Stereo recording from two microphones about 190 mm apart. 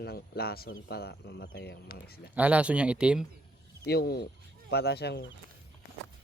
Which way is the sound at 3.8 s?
55° left (ahead or behind).